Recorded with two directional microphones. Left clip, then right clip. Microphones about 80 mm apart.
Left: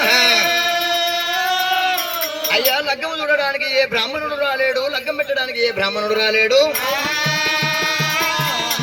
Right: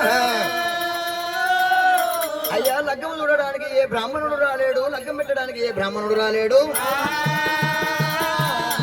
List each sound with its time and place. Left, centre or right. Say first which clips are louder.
0.0 s music: left 5 dB; centre
1.5 s a sound: right 4 dB; centre
6.1 s speech: left 2 dB; centre